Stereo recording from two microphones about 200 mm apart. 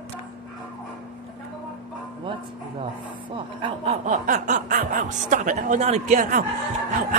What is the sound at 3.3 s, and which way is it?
Speech, 30° right (ahead or behind).